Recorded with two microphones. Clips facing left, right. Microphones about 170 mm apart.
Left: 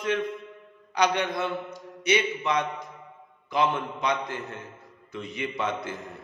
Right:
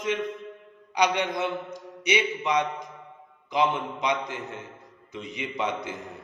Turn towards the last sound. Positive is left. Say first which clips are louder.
# even
turn(degrees=-15)  # may be behind; listen again after turning